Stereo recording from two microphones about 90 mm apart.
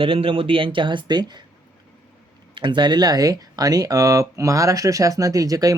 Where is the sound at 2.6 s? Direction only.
60° right (ahead or behind).